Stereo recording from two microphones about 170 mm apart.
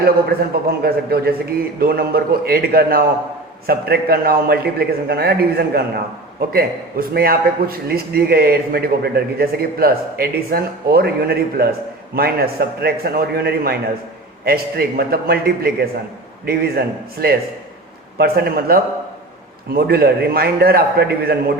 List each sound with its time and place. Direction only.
0.8 s a man's voice: 65° right (ahead or behind)